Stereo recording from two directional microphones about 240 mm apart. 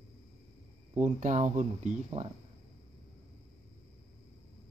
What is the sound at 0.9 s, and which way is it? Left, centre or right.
Speech, right.